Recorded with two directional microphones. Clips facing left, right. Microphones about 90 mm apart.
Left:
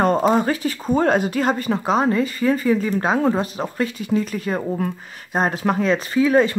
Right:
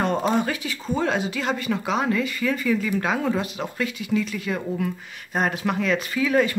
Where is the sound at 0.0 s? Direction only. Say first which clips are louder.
Left 5 dB; 40° left (ahead or behind).